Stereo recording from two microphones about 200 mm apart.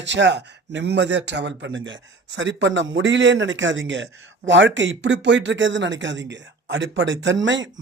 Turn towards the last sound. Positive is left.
turn(degrees=-70)  # may be behind; listen again after turning